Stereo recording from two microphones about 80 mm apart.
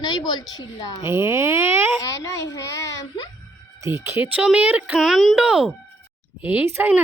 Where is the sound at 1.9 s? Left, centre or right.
Left.